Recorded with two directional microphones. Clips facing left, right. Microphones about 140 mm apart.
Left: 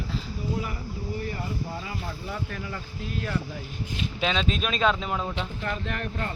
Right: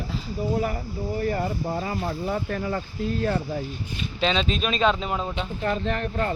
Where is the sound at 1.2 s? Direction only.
50° right (ahead or behind).